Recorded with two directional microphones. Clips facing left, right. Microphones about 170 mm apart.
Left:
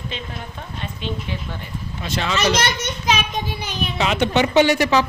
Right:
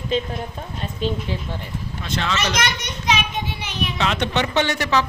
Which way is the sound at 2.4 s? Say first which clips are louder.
Left 8 dB; 30° left (ahead or behind).